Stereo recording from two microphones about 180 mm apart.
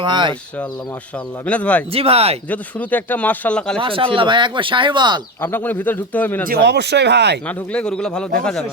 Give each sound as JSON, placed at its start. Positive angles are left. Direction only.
{"t": 0.0, "sound": "speech", "side_deg": -25}
{"t": 1.5, "sound": "a man's voice", "side_deg": 5}
{"t": 1.9, "sound": "speech", "side_deg": -35}
{"t": 2.5, "sound": "a man's voice", "side_deg": 10}
{"t": 3.8, "sound": "speech", "side_deg": -30}
{"t": 5.4, "sound": "a man's voice", "side_deg": 10}
{"t": 6.5, "sound": "speech", "side_deg": -65}
{"t": 7.4, "sound": "speech", "side_deg": 5}